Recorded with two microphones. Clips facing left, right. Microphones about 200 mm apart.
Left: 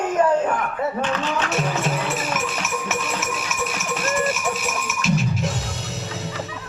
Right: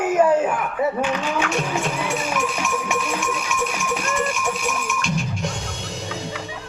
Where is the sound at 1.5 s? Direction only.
5° left (ahead or behind).